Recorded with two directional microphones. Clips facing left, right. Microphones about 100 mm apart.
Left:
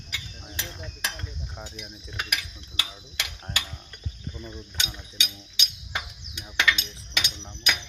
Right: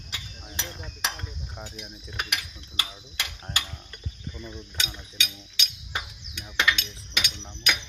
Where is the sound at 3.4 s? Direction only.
Centre (ahead or behind).